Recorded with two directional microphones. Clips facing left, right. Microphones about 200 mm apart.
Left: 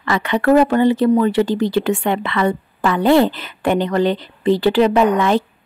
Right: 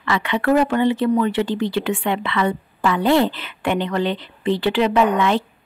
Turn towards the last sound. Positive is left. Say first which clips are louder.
# left 3 dB
turn(degrees=40)  # may be behind; listen again after turning